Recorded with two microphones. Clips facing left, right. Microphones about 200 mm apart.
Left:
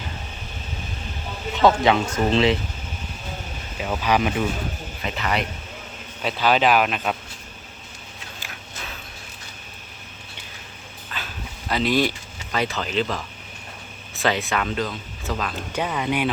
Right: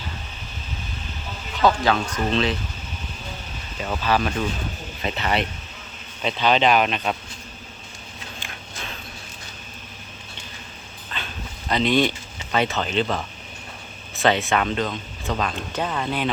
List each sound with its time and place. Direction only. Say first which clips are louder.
1.6 s speech: left 2 dB; 25° left (ahead or behind)
3.8 s speech: left 1 dB; 10° left (ahead or behind)
5.0 s speech: right 1 dB; 30° right (ahead or behind)
6.2 s speech: even; 5° left (ahead or behind)
11.1 s dog: right 1 dB; 5° left (ahead or behind)
11.7 s speech: right 1 dB; 5° left (ahead or behind)
14.2 s speech: right 3 dB; centre (ahead or behind)